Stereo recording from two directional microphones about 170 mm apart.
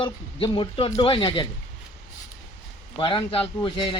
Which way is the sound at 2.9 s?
30° left (ahead or behind).